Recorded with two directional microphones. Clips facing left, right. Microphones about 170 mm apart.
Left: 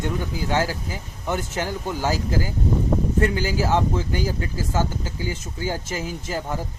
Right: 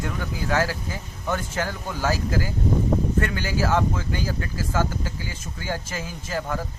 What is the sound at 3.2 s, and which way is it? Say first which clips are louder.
Speech: left 3 dB; 20° left (ahead or behind).